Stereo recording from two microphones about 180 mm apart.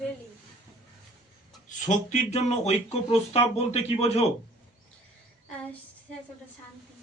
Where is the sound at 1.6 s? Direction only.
45° left (ahead or behind).